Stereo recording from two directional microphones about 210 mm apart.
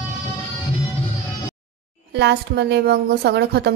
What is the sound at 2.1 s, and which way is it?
A woman's voice, 50° right (ahead or behind).